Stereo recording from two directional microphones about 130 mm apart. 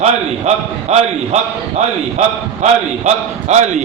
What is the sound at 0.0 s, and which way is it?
A man's voice, 55° right (ahead or behind).